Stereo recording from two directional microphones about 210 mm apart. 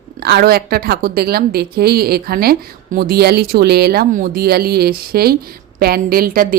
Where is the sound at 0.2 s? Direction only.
50° right (ahead or behind).